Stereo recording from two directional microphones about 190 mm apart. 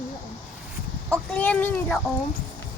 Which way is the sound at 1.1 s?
10° left (ahead or behind).